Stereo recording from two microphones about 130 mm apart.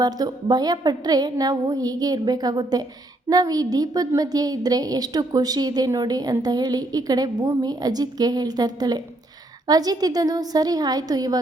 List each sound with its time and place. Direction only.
0.0 s a woman's voice: 30° right (ahead or behind)